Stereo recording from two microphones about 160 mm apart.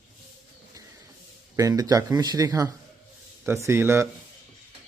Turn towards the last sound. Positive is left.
turn(degrees=-15)  # may be behind; listen again after turning